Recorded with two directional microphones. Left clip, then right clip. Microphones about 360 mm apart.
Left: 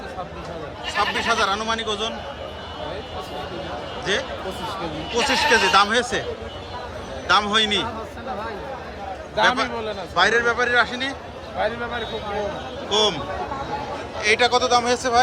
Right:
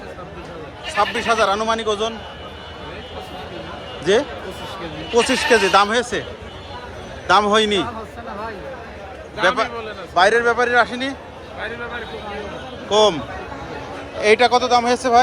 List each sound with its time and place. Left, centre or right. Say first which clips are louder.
0.9 s a man's voice: right 3 dB; centre
4.0 s a man's voice: right 7 dB; centre
7.3 s a man's voice: right 4 dB; centre
9.4 s a man's voice: right 1 dB; centre
9.6 s a man's voice: left 1 dB; left
10.2 s a man's voice: right 4 dB; centre
12.9 s a man's voice: right 5 dB; centre
14.2 s a man's voice: right 4 dB; centre